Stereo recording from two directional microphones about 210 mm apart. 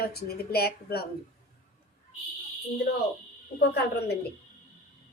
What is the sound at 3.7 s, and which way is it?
Speech, 50° left (ahead or behind).